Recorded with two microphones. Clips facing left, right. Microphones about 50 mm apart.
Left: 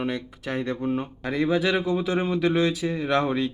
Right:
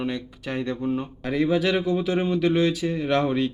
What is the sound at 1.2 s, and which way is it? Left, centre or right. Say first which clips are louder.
Speech: right 1 dB; centre.